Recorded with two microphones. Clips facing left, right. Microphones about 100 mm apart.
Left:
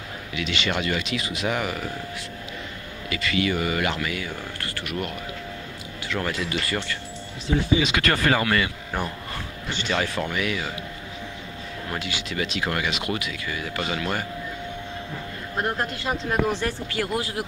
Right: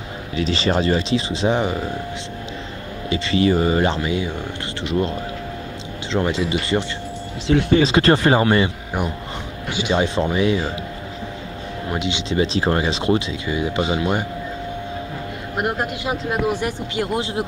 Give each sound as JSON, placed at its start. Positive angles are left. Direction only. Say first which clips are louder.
{"t": 0.4, "sound": "speech", "louder": "right 7 dB", "side_deg": -35}
{"t": 3.1, "sound": "speech", "louder": "right 7 dB", "side_deg": -30}
{"t": 7.4, "sound": "speech", "louder": "right 6 dB", "side_deg": -70}
{"t": 7.8, "sound": "speech", "louder": "right 8 dB", "side_deg": -30}
{"t": 9.7, "sound": "speech", "louder": "right 6 dB", "side_deg": -10}
{"t": 9.9, "sound": "speech", "louder": "right 7 dB", "side_deg": -25}
{"t": 11.9, "sound": "speech", "louder": "right 8 dB", "side_deg": -20}
{"t": 15.5, "sound": "speech", "louder": "right 4 dB", "side_deg": -15}